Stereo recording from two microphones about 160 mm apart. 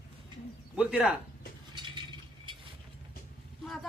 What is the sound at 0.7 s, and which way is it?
Speech, 5° right (ahead or behind).